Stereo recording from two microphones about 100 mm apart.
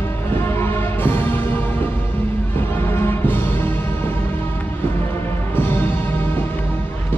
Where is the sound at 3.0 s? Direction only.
20° left (ahead or behind).